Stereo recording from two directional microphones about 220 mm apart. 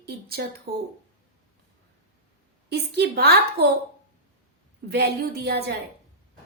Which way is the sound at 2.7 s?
50° right (ahead or behind).